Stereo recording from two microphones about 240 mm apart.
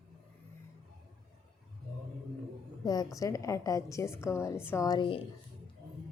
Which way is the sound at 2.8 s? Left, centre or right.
Centre.